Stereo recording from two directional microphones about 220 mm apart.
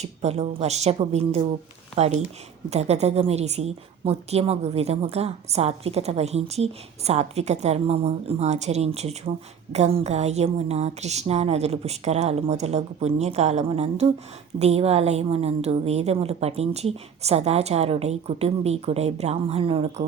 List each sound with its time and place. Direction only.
0.0 s a woman's voice: 30° right (ahead or behind)